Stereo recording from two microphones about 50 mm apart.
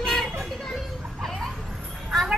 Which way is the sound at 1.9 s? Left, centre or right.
Centre.